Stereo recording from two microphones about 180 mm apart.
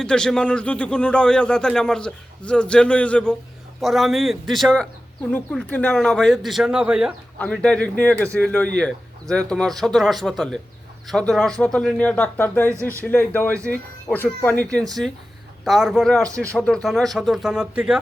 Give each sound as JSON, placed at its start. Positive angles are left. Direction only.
{"t": 0.0, "sound": "speech", "side_deg": 5}